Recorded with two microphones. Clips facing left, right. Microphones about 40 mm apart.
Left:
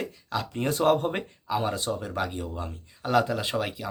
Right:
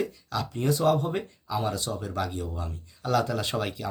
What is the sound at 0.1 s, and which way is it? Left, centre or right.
Speech, left.